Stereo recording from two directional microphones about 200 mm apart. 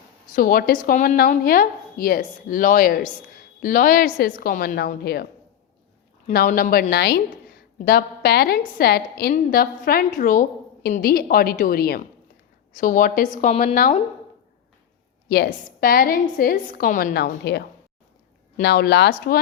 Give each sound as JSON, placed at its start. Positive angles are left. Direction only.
{"t": 0.3, "sound": "a woman's voice", "side_deg": 45}
{"t": 15.3, "sound": "a woman's voice", "side_deg": 50}